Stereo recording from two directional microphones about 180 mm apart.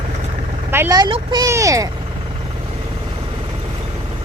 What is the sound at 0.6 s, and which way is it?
Speech, 10° right (ahead or behind).